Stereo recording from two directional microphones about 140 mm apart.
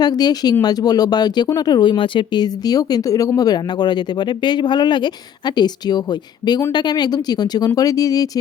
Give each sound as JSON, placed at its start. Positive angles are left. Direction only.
{"t": 0.0, "sound": "speech", "side_deg": 30}